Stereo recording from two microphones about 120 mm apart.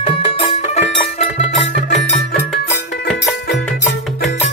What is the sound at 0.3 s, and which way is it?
Music, 55° left (ahead or behind).